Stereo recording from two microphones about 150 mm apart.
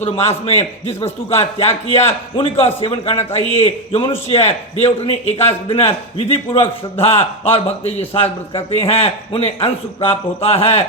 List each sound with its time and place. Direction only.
0.0 s a man's voice: 45° left (ahead or behind)